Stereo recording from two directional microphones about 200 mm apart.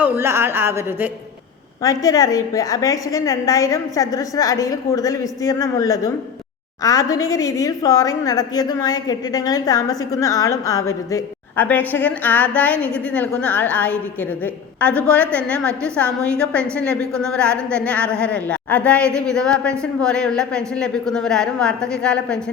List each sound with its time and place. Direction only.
0.0 s a woman's voice: 10° right (ahead or behind)
1.8 s a woman's voice: 15° left (ahead or behind)